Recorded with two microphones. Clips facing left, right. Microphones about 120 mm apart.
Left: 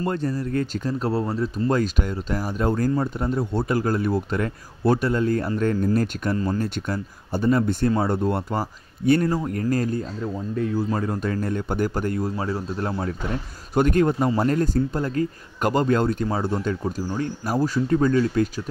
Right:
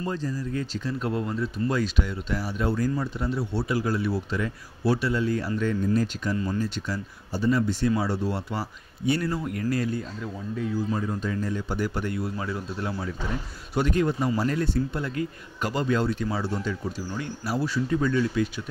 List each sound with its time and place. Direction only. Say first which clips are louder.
0.0 s speech: left 5 dB; 60° left (ahead or behind)
6.3 s speech: left 4 dB; 40° left (ahead or behind)
6.6 s speech: left 3 dB; 55° left (ahead or behind)